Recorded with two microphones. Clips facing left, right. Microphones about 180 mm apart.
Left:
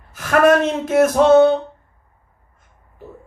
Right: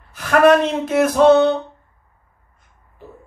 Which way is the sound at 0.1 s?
50° left (ahead or behind).